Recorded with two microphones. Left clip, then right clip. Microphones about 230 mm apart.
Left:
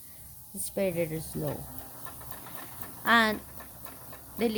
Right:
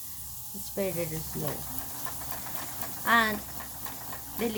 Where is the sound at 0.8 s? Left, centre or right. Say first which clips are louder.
Left 3 dB; left.